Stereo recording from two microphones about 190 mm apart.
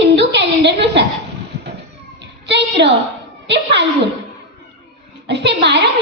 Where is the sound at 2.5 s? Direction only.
65° right (ahead or behind).